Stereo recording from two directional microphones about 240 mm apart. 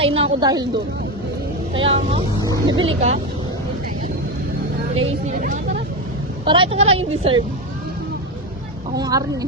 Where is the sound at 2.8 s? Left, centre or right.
Right.